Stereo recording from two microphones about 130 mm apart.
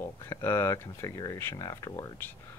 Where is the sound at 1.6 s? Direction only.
30° left (ahead or behind).